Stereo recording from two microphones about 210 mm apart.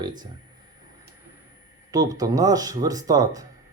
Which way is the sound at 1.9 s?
15° right (ahead or behind).